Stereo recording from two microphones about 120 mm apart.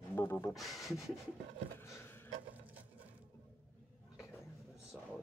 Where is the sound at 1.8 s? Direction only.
20° left (ahead or behind).